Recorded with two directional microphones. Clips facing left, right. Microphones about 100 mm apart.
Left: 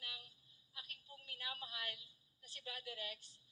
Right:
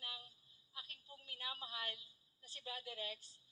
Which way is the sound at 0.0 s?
30° right (ahead or behind).